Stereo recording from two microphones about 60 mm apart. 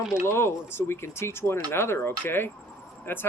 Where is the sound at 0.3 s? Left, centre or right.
Left.